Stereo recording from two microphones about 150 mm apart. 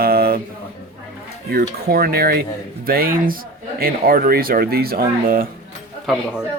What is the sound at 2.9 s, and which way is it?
Speech, 75° right (ahead or behind).